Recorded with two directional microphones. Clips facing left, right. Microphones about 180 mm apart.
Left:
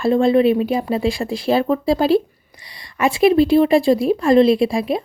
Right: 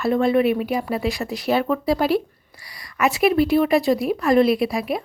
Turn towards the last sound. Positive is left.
turn(degrees=25)  # may be behind; listen again after turning